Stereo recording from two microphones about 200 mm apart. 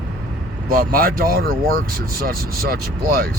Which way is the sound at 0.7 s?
45° right (ahead or behind).